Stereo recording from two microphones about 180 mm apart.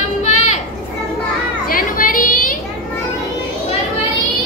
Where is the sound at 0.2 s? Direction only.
40° left (ahead or behind).